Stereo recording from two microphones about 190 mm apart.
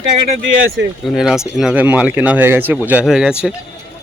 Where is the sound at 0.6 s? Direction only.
90° right.